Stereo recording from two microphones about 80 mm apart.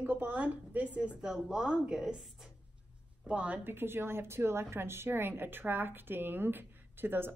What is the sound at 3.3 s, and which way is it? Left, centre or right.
A woman's voice, centre.